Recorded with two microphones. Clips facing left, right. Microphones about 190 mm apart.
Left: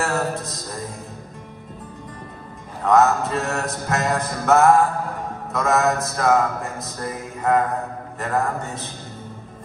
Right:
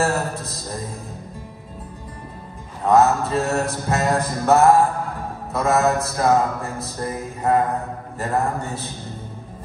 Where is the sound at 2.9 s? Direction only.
30° right (ahead or behind).